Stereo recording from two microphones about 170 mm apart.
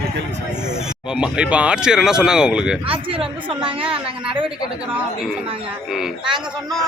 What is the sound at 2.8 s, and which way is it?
Speech, 30° right (ahead or behind).